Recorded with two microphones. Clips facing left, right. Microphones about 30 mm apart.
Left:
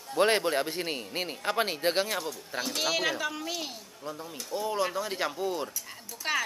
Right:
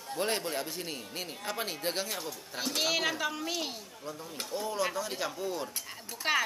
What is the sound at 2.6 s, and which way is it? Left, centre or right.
Speech, centre.